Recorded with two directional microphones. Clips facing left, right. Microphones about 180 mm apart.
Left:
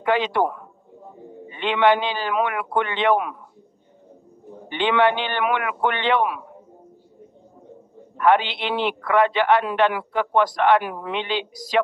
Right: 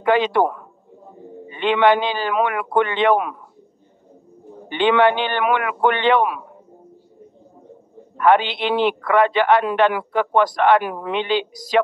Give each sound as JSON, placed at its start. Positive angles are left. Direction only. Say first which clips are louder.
{"t": 0.0, "sound": "a man's voice", "louder": "right 4 dB", "side_deg": -50}
{"t": 1.5, "sound": "a man's voice", "louder": "right 3 dB", "side_deg": -50}
{"t": 4.6, "sound": "a man's voice", "louder": "right 3 dB", "side_deg": -50}
{"t": 8.2, "sound": "a man's voice", "louder": "right 2 dB", "side_deg": -50}